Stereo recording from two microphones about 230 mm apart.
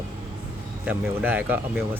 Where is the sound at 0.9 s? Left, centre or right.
Centre.